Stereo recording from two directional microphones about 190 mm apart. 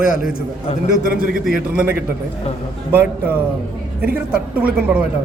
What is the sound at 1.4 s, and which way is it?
Speech, 5° right (ahead or behind).